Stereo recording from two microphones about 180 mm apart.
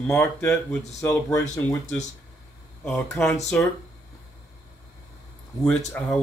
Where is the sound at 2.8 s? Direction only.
5° left (ahead or behind).